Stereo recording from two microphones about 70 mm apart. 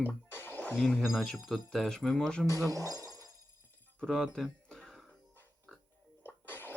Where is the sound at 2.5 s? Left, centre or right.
Right.